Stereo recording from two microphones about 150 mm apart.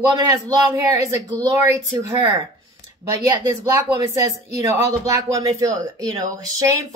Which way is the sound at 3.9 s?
20° right (ahead or behind).